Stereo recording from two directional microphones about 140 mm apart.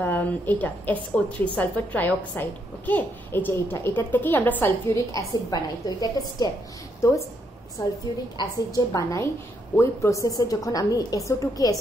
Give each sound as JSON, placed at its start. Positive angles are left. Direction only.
{"t": 0.0, "sound": "a woman's voice", "side_deg": 15}